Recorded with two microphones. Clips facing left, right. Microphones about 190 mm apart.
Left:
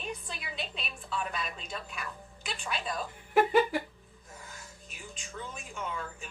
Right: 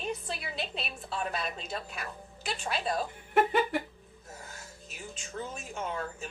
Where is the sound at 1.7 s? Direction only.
45° right (ahead or behind).